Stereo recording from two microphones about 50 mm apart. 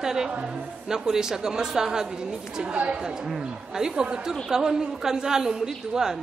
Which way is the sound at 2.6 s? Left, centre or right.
Right.